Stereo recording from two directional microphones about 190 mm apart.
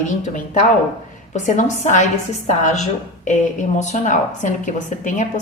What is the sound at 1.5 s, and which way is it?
A woman's voice, 40° left (ahead or behind).